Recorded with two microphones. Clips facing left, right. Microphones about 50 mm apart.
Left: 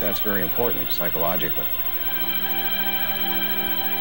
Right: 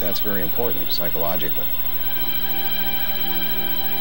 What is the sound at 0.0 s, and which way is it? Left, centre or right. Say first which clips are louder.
Speech: left 2 dB; centre.